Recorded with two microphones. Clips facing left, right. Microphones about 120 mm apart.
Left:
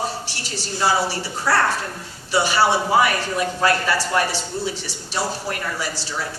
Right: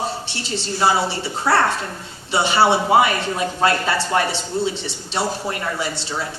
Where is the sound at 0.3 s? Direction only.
25° right (ahead or behind).